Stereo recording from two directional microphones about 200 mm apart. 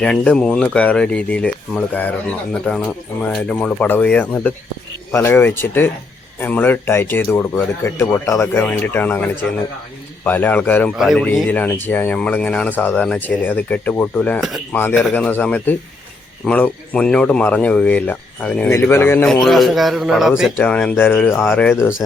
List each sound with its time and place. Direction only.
0.0 s speech: 5° left (ahead or behind)